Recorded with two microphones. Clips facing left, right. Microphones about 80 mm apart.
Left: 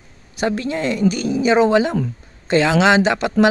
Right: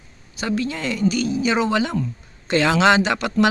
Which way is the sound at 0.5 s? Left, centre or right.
Left.